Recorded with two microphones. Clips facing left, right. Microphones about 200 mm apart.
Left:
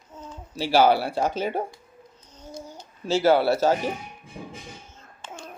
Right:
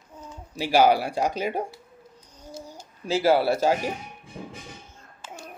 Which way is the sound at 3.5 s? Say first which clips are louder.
Left 1 dB; 10° right (ahead or behind).